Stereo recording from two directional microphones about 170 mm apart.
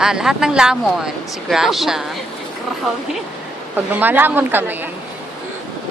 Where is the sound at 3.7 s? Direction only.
10° right (ahead or behind).